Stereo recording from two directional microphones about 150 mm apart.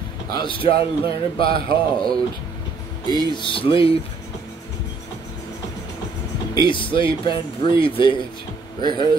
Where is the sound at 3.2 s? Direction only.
35° left (ahead or behind).